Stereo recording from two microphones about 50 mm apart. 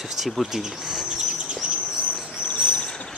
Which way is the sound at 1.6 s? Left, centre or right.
Right.